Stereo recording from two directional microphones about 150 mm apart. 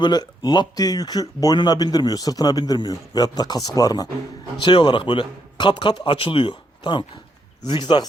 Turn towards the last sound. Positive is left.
turn(degrees=30)  # may be behind; listen again after turning